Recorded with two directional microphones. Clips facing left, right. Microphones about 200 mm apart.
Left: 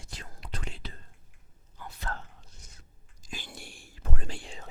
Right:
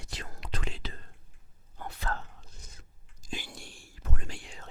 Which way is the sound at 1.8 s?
65° right (ahead or behind).